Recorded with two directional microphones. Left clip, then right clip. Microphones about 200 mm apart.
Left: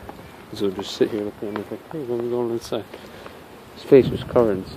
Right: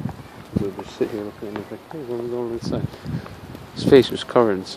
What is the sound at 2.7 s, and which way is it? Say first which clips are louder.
Speech: left 1 dB; 10° left (ahead or behind).